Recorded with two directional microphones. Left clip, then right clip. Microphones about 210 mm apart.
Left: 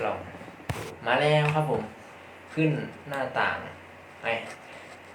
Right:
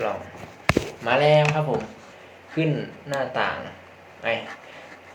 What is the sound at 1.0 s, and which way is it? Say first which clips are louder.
Speech: right 5 dB; 30° right (ahead or behind).